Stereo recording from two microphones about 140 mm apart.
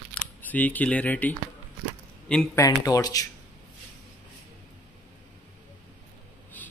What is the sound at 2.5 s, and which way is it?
Speech, 25° left (ahead or behind).